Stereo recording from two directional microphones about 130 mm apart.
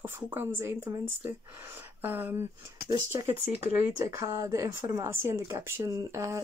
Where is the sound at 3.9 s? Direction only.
25° right (ahead or behind).